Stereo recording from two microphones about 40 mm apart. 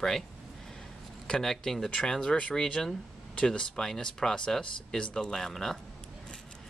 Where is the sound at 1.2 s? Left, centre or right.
Centre.